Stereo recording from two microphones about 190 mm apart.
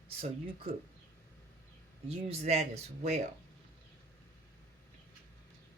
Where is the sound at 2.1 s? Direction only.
35° right (ahead or behind).